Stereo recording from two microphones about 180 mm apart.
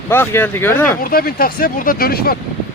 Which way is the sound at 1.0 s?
55° left (ahead or behind).